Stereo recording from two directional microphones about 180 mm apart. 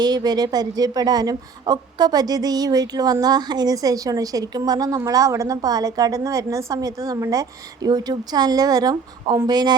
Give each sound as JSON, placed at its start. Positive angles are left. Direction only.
{"t": 0.0, "sound": "speech", "side_deg": -20}